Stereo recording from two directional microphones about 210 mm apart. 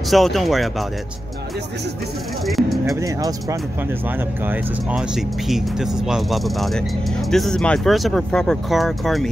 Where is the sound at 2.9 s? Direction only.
15° right (ahead or behind).